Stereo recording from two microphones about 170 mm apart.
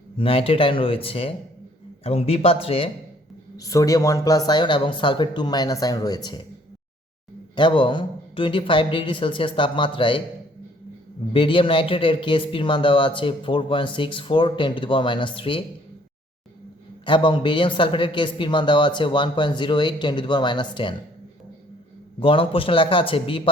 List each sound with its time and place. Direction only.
0.2 s a man's voice: 35° left (ahead or behind)
3.6 s a man's voice: 20° left (ahead or behind)
7.5 s a man's voice: 30° left (ahead or behind)
11.3 s a man's voice: 30° left (ahead or behind)
17.1 s a man's voice: 30° left (ahead or behind)
22.2 s a man's voice: 30° left (ahead or behind)